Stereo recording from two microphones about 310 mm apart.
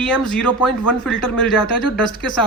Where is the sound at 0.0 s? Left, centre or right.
Centre.